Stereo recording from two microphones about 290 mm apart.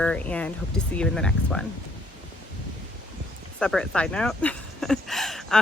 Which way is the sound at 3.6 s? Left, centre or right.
Centre.